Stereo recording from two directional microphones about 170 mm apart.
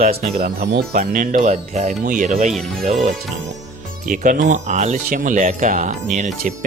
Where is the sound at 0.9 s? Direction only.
50° right (ahead or behind).